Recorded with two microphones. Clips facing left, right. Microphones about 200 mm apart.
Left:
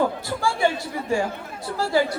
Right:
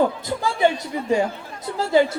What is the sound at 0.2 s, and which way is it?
Speech, 20° right (ahead or behind).